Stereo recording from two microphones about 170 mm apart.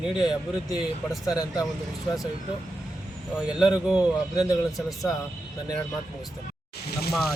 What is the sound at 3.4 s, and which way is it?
Speech, 5° right (ahead or behind).